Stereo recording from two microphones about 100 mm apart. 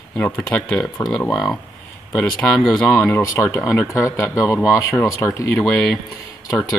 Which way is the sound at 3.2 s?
25° left (ahead or behind).